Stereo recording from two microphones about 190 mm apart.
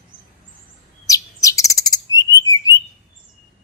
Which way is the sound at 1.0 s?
15° left (ahead or behind).